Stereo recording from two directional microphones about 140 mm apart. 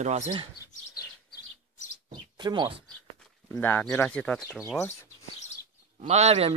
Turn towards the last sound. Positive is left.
turn(degrees=-50)  # may be behind; listen again after turning